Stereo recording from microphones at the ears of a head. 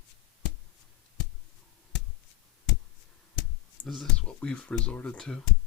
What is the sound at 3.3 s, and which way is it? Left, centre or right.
Clicking, left.